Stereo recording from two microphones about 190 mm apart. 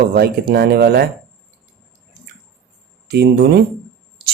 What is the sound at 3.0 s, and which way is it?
Speech, 60° right (ahead or behind).